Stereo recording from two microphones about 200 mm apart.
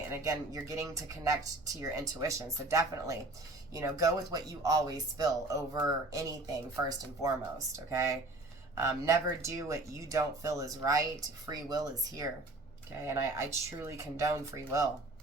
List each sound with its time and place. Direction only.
0.1 s speech: 15° right (ahead or behind)